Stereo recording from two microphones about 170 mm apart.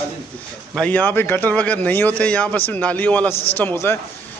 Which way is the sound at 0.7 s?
10° left (ahead or behind).